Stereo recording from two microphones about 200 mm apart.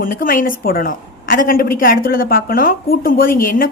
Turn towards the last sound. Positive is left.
turn(degrees=45)  # may be behind; listen again after turning